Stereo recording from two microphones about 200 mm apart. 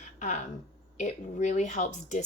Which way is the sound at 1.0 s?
35° left (ahead or behind).